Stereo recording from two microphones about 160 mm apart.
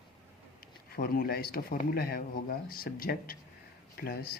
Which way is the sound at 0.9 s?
65° left (ahead or behind).